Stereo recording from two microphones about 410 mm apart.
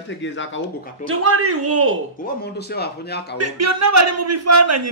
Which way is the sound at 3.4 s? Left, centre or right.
Right.